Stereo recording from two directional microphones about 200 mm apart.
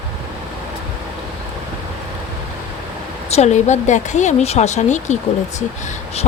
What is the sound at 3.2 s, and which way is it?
A woman's voice, 35° left (ahead or behind).